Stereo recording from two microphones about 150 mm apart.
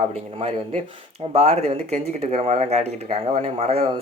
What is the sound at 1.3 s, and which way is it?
Speech, 45° right (ahead or behind).